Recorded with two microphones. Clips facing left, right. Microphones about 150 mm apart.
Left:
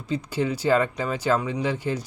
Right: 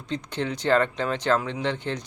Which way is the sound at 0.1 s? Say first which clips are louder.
Left 3 dB; 10° left (ahead or behind).